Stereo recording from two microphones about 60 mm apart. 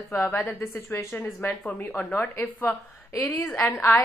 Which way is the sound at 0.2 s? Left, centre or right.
Left.